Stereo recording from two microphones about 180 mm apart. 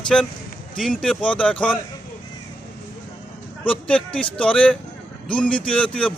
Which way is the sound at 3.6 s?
5° left (ahead or behind).